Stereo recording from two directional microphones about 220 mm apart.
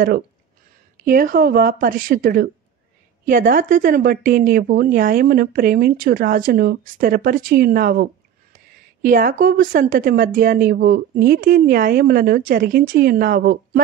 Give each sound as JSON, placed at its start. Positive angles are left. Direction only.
{"t": 1.0, "sound": "speech", "side_deg": -40}